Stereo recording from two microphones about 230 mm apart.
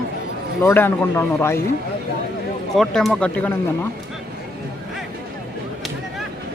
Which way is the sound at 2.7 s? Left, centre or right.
Centre.